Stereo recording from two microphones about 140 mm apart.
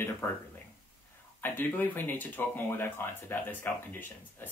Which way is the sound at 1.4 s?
15° left (ahead or behind).